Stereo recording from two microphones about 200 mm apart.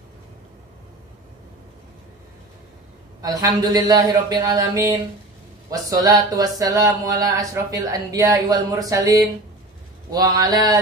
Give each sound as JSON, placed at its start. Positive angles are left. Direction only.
{"t": 3.2, "sound": "speech", "side_deg": -15}